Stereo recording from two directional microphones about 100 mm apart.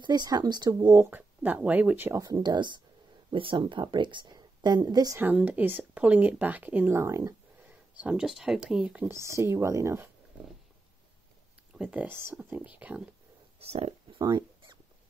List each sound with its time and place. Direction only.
0.0 s speech: 45° right (ahead or behind)
1.1 s speech: 15° right (ahead or behind)
2.1 s speech: 40° right (ahead or behind)
5.2 s speech: 15° right (ahead or behind)
8.0 s speech: 10° right (ahead or behind)
9.1 s speech: 30° right (ahead or behind)
11.7 s speech: 10° right (ahead or behind)
12.1 s speech: 25° right (ahead or behind)
13.6 s speech: 90° right